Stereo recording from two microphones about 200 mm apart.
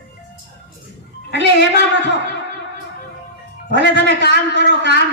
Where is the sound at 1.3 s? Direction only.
60° right (ahead or behind).